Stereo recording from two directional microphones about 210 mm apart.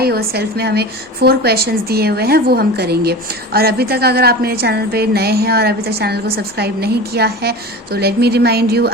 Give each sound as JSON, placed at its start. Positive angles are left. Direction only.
{"t": 0.0, "sound": "a woman's voice", "side_deg": -45}